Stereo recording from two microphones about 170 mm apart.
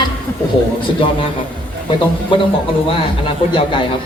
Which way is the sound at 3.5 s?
30° left (ahead or behind).